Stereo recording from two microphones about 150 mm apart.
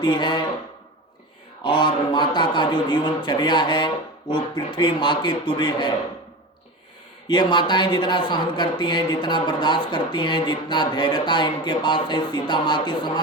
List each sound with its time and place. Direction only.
0.0 s speech: 30° left (ahead or behind)
1.6 s speech: 30° left (ahead or behind)
7.3 s speech: 30° left (ahead or behind)